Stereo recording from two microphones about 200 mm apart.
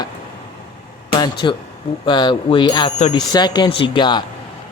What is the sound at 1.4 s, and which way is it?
Speech, 25° left (ahead or behind).